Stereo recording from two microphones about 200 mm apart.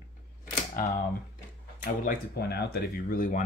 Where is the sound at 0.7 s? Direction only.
45° left (ahead or behind).